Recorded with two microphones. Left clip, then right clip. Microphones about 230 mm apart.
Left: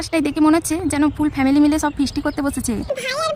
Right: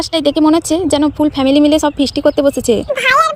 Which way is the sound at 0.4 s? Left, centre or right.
Centre.